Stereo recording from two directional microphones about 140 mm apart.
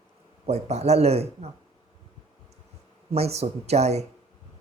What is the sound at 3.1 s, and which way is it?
Speech, 50° right (ahead or behind).